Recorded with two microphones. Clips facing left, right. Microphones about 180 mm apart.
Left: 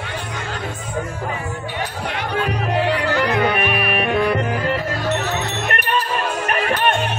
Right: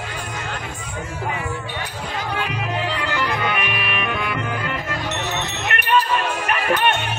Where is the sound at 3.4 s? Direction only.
40° left (ahead or behind).